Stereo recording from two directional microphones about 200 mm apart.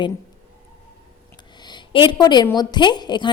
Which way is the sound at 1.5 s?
20° left (ahead or behind).